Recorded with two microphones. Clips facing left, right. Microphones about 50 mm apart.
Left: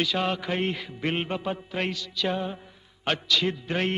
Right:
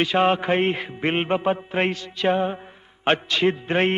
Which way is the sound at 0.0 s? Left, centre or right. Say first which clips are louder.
Right 7 dB; right.